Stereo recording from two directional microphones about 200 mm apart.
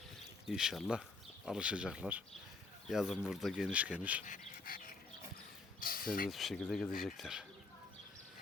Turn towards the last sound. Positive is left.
turn(degrees=0)  # may be behind; listen again after turning